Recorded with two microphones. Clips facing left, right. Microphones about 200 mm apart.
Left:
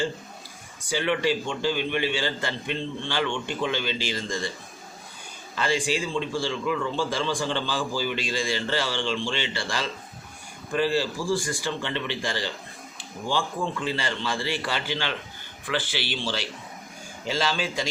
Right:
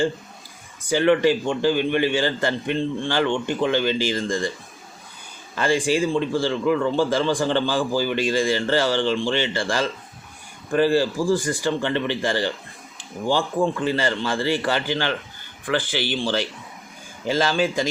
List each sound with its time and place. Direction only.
0.9 s a man's voice: 50° right (ahead or behind)
5.5 s a man's voice: 50° right (ahead or behind)